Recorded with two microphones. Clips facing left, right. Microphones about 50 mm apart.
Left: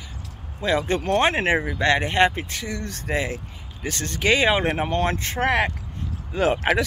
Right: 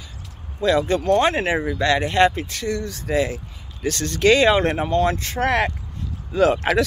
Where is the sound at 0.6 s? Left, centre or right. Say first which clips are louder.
Right 4 dB; left.